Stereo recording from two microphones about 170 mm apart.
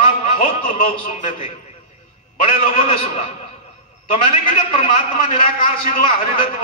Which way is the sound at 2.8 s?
40° left (ahead or behind).